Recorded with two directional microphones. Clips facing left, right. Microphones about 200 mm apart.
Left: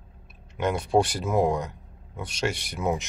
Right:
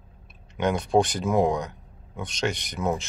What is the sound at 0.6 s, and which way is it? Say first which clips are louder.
Speech: right 1 dB; 5° left (ahead or behind).